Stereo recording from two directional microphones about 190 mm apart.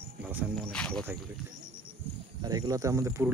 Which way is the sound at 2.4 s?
20° right (ahead or behind).